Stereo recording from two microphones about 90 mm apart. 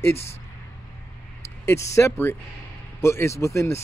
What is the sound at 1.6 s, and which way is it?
Speech, 30° left (ahead or behind).